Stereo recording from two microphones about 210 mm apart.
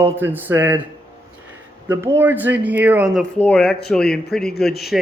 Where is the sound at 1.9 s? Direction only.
10° right (ahead or behind).